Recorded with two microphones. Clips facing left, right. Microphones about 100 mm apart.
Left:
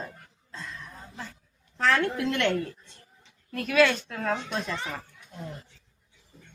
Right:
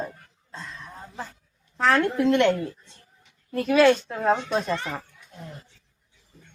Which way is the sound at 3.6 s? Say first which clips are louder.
Right 5 dB; 30° right (ahead or behind).